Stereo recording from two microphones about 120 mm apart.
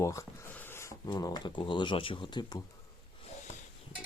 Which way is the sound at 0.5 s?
20° left (ahead or behind).